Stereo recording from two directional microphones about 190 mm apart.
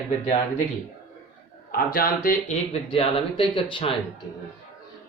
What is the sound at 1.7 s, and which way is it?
Speech, 50° left (ahead or behind).